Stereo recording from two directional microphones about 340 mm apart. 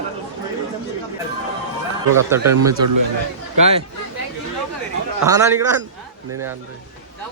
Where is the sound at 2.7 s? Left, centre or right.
Right.